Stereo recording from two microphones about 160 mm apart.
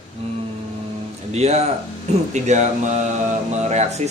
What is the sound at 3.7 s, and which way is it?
Speech, 45° right (ahead or behind).